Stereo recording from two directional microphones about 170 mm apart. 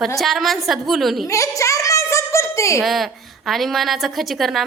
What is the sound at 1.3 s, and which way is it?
A woman's voice, 20° left (ahead or behind).